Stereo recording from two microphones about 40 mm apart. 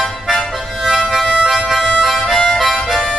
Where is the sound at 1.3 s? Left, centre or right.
Centre.